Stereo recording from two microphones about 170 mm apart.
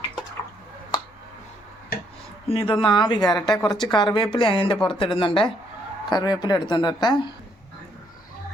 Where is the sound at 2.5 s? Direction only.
35° left (ahead or behind).